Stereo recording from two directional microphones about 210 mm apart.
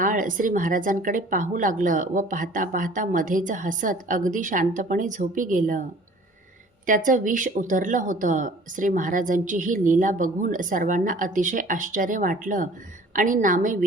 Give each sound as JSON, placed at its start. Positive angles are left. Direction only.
{"t": 0.0, "sound": "speech", "side_deg": -40}
{"t": 6.8, "sound": "speech", "side_deg": -40}